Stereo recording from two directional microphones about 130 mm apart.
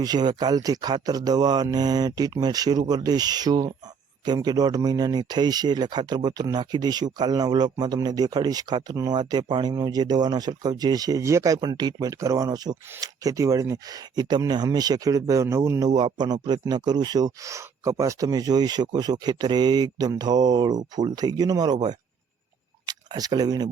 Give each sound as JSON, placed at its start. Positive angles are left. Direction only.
{"t": 0.0, "sound": "speech", "side_deg": -30}
{"t": 16.0, "sound": "speech", "side_deg": -35}